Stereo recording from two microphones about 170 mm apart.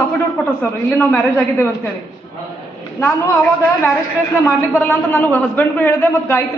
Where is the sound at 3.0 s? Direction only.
15° left (ahead or behind).